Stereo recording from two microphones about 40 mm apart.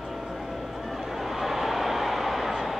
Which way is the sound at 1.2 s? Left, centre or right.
Centre.